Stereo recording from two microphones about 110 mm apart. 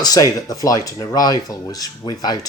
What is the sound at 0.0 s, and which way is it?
A man's voice, 35° left (ahead or behind).